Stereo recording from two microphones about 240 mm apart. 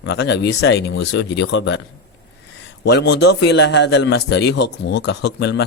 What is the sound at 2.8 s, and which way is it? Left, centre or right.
A man's voice, left.